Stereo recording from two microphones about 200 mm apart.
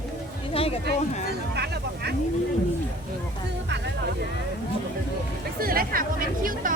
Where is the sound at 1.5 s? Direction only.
55° right (ahead or behind).